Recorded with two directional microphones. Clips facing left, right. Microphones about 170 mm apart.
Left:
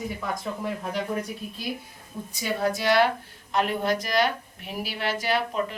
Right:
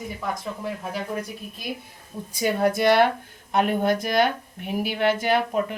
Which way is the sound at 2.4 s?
55° right (ahead or behind).